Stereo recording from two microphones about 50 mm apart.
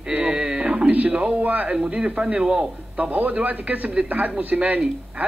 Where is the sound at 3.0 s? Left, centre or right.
Right.